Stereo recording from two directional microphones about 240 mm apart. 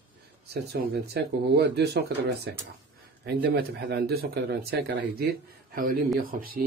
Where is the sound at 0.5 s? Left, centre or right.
Right.